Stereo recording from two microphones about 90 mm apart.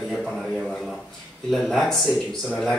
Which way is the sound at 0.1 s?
Centre (ahead or behind).